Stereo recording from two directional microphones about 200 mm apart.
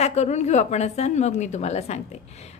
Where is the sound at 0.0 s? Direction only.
35° left (ahead or behind).